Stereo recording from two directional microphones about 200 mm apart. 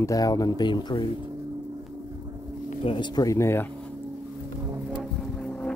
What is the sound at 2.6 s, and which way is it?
Speech, 25° left (ahead or behind).